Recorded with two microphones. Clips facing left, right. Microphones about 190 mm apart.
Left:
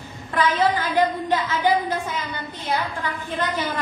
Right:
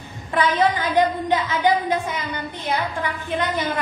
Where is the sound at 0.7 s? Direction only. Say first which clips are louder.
Right 1 dB; 15° right (ahead or behind).